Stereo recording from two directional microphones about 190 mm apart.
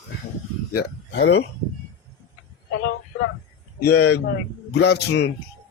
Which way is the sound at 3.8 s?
55° left (ahead or behind).